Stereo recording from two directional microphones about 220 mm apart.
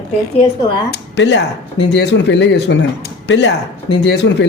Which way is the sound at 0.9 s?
55° left (ahead or behind).